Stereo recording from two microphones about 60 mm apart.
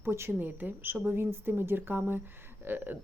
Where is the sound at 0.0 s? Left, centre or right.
Right.